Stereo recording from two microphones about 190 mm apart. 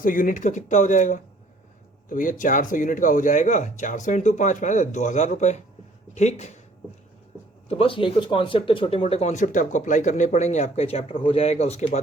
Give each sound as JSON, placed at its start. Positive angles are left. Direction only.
{"t": 0.0, "sound": "speech", "side_deg": 45}
{"t": 7.7, "sound": "speech", "side_deg": 30}